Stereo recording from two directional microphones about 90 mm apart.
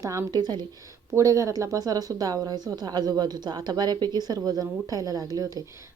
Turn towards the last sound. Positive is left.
turn(degrees=-35)  # may be behind; listen again after turning